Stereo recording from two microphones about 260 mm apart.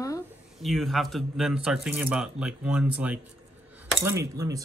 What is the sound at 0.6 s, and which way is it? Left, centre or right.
Speech, centre.